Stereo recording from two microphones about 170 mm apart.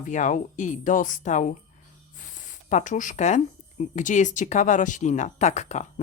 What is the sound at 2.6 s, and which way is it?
Speech, 45° left (ahead or behind).